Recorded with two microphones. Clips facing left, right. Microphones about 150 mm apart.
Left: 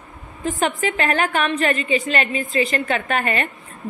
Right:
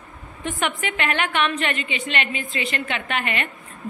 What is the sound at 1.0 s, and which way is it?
A woman's voice, 40° left (ahead or behind).